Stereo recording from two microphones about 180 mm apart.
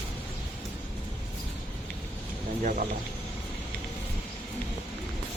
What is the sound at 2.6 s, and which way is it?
Speech, 45° right (ahead or behind).